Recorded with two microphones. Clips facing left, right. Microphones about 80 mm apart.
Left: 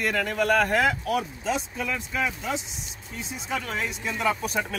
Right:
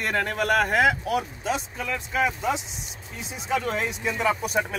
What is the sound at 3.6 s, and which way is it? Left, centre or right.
Speech, right.